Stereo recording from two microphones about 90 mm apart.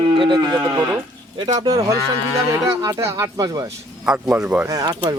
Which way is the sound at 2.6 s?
40° right (ahead or behind).